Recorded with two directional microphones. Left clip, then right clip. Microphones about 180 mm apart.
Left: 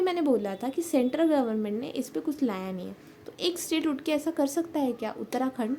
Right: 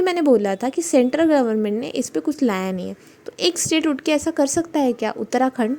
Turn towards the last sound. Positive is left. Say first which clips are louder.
# right 10 dB
turn(degrees=-40)  # may be behind; listen again after turning